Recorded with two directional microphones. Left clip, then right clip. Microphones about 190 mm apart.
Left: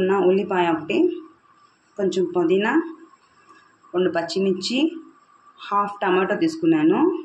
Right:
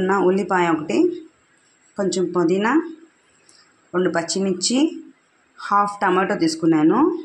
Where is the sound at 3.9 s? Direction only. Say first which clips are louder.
Right 1 dB; 35° right (ahead or behind).